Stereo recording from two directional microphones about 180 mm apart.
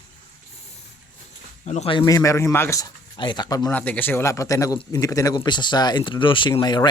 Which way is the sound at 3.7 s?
10° left (ahead or behind).